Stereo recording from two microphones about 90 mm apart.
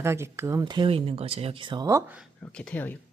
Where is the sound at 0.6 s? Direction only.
55° right (ahead or behind).